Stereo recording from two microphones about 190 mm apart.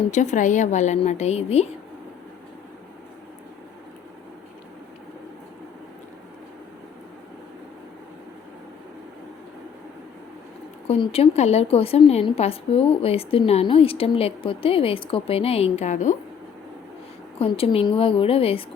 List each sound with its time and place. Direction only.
0.1 s a woman's voice: 40° left (ahead or behind)
10.8 s a woman's voice: 30° left (ahead or behind)
17.4 s a woman's voice: 30° left (ahead or behind)